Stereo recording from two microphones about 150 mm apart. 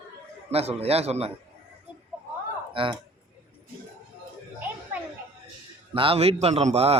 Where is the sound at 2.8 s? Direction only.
35° right (ahead or behind).